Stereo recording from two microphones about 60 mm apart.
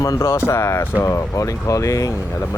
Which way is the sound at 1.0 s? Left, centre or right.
Left.